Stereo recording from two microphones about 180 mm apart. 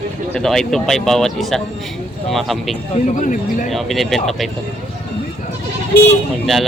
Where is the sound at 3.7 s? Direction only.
Centre (ahead or behind).